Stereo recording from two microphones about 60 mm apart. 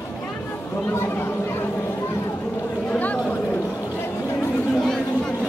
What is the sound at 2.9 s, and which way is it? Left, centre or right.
Chatter, left.